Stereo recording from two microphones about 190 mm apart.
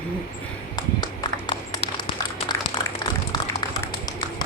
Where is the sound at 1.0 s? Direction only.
25° left (ahead or behind).